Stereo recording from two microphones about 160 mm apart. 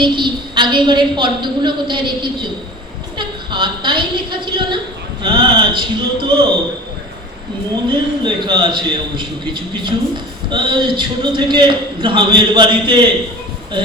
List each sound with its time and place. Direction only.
0.0 s a man's voice: 30° right (ahead or behind)
7.9 s a man's voice: 30° right (ahead or behind)